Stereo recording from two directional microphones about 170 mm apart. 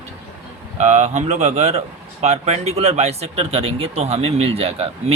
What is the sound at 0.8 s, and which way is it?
Speech, 40° right (ahead or behind).